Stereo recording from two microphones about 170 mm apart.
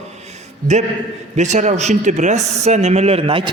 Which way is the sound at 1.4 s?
45° right (ahead or behind).